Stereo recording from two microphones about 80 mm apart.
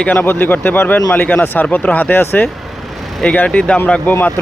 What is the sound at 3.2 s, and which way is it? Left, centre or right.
Speech, centre.